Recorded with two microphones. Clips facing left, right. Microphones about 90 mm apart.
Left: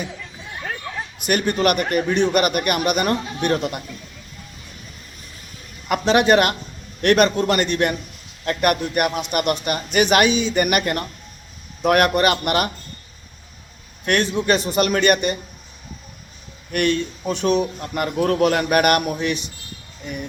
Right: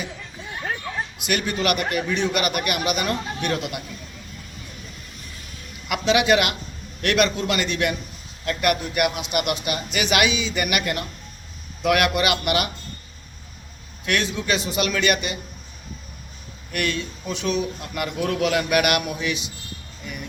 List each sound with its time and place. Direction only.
1.2 s a man's voice: 45° left (ahead or behind)
5.9 s a man's voice: 45° left (ahead or behind)
14.0 s a man's voice: 50° left (ahead or behind)
16.7 s a man's voice: 45° left (ahead or behind)